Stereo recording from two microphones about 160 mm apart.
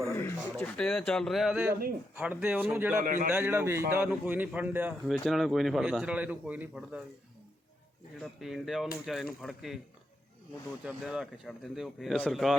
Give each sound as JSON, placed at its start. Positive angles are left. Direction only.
{"t": 0.1, "sound": "a sound", "side_deg": 15}
{"t": 0.5, "sound": "a man's voice", "side_deg": 5}
{"t": 3.0, "sound": "a man's voice", "side_deg": -55}
{"t": 3.3, "sound": "a man's voice", "side_deg": -15}
{"t": 5.0, "sound": "a man's voice", "side_deg": 0}
{"t": 8.2, "sound": "a man's voice", "side_deg": 0}
{"t": 10.8, "sound": "a man's voice", "side_deg": -5}